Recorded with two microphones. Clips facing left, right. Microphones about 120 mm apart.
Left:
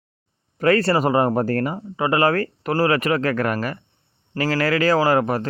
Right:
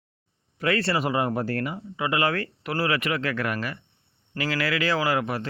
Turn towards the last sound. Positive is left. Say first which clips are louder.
# left 7 dB
turn(degrees=45)  # may be behind; listen again after turning